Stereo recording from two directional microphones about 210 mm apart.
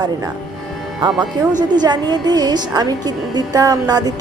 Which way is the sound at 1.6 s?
20° right (ahead or behind).